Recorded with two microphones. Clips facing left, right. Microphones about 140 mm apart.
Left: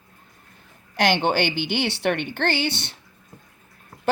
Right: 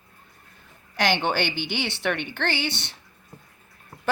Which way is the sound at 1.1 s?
45° left (ahead or behind).